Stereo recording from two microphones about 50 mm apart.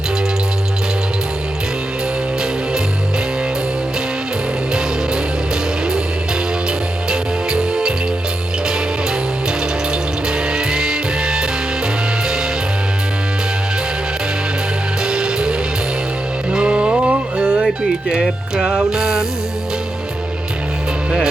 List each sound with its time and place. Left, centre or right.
7.1 s music: centre
10.5 s music: centre
15.0 s music: centre